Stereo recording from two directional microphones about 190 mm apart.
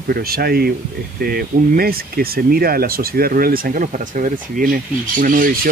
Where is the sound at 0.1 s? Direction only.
55° right (ahead or behind).